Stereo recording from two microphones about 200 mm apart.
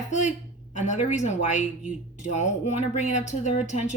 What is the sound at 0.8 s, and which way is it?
Speech, 40° left (ahead or behind).